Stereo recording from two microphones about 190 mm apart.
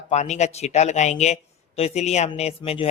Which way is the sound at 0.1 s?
35° left (ahead or behind).